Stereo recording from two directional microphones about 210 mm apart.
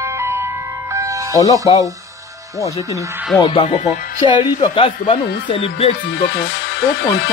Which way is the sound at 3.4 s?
30° left (ahead or behind).